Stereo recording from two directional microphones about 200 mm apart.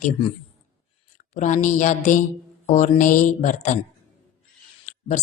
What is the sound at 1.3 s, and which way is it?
Speech, 35° left (ahead or behind).